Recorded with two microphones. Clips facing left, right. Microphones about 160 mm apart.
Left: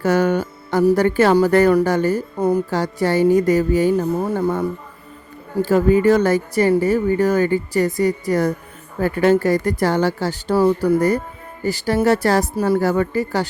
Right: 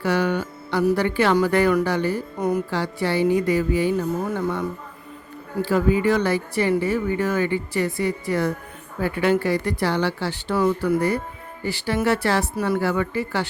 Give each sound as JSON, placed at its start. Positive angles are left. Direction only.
{"t": 0.0, "sound": "speech", "side_deg": 45}
{"t": 2.4, "sound": "speech", "side_deg": 30}
{"t": 2.6, "sound": "speech", "side_deg": 45}
{"t": 5.6, "sound": "speech", "side_deg": 45}